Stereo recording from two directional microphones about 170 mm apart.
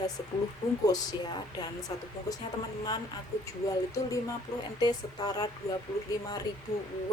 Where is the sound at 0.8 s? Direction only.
25° left (ahead or behind).